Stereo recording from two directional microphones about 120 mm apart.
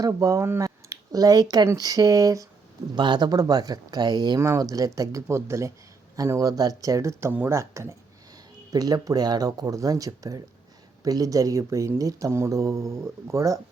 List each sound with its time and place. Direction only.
0.0 s speech: 25° right (ahead or behind)
4.4 s speech: 25° right (ahead or behind)